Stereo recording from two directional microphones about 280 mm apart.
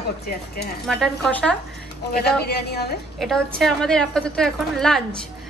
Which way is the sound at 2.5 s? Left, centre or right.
Left.